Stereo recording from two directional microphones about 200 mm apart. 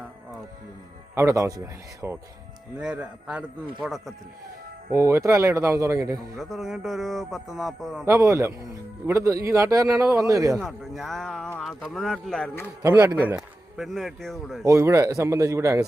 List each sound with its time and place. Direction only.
1.1 s a man's voice: 15° right (ahead or behind)
4.9 s a man's voice: 15° right (ahead or behind)
6.4 s speech: centre (ahead or behind)
8.0 s a man's voice: 15° right (ahead or behind)
10.6 s speech: centre (ahead or behind)
12.6 s a man's voice: 10° right (ahead or behind)
13.2 s speech: centre (ahead or behind)
14.6 s a man's voice: 15° right (ahead or behind)